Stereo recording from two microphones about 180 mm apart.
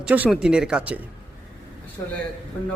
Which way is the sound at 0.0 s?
5° right (ahead or behind).